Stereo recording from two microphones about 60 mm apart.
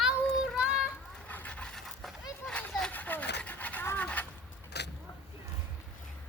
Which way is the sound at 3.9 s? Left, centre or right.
Left.